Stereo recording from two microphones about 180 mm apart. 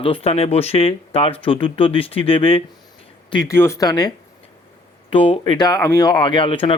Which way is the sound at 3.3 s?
20° left (ahead or behind).